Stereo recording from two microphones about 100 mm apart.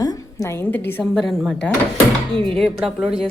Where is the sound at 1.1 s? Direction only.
Centre (ahead or behind).